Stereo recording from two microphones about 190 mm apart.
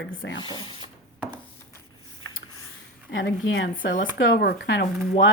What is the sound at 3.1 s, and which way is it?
Speech, 90° left.